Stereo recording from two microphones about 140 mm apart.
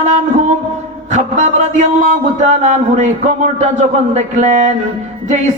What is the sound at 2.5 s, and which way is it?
A man's voice, 60° right (ahead or behind).